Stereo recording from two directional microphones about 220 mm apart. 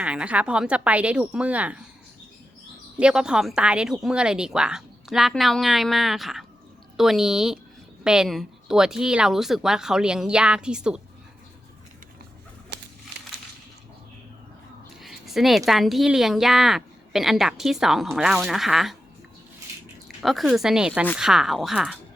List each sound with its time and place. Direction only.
0.0 s speech: 5° right (ahead or behind)
3.0 s speech: 5° right (ahead or behind)
12.7 s crumpling: 50° right (ahead or behind)
15.0 s speech: centre (ahead or behind)
20.2 s speech: centre (ahead or behind)